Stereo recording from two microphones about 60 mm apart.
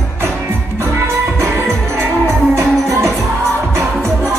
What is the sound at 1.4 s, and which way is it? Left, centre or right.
Music, right.